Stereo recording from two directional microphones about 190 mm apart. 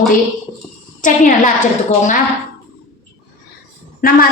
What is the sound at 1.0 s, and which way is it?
Speech, 40° left (ahead or behind).